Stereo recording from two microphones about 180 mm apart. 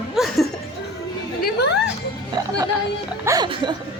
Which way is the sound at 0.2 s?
5° right (ahead or behind).